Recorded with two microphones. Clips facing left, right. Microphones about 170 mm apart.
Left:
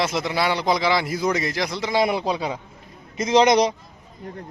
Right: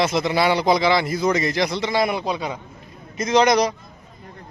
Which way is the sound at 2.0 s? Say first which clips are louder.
Left 1 dB; 30° left (ahead or behind).